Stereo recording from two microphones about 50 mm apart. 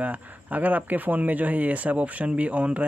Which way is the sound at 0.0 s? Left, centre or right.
Right.